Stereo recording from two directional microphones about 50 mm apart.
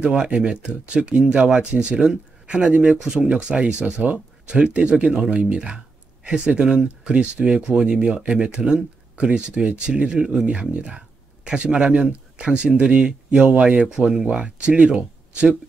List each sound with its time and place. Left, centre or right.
0.0 s speech: right